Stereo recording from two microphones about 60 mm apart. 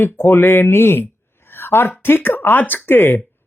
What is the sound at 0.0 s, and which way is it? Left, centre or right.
Speech, left.